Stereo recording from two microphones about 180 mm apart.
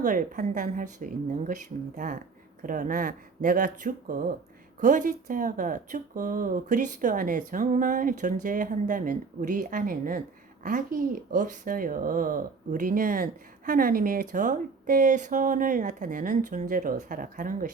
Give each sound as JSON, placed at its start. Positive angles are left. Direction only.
{"t": 0.0, "sound": "speech", "side_deg": -50}
{"t": 2.6, "sound": "speech", "side_deg": -50}